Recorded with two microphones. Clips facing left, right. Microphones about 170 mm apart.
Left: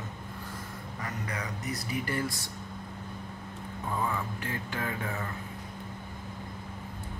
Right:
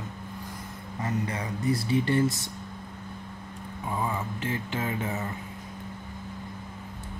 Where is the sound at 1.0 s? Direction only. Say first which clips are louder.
Right 7 dB; 25° right (ahead or behind).